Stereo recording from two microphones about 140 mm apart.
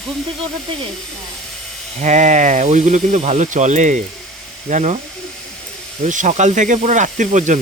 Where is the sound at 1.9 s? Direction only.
55° right (ahead or behind).